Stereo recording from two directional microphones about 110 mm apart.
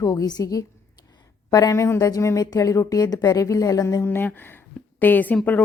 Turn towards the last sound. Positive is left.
turn(degrees=15)  # may be behind; listen again after turning